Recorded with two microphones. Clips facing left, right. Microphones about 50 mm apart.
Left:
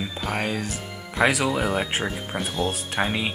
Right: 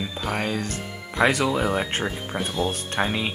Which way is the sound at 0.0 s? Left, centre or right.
Centre.